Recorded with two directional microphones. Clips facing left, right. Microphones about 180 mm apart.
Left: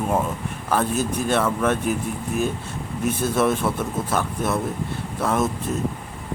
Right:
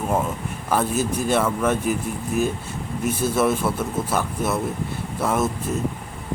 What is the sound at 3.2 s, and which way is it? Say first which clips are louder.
A man's voice: even; 5° right (ahead or behind).